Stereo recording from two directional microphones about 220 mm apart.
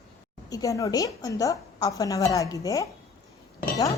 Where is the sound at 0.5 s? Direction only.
15° left (ahead or behind).